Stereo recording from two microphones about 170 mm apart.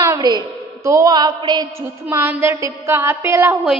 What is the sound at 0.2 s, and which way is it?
A woman's voice, 25° right (ahead or behind).